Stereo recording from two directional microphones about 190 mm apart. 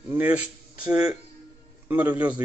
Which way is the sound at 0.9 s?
20° right (ahead or behind).